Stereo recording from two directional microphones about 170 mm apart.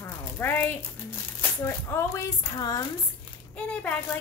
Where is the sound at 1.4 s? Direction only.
15° left (ahead or behind).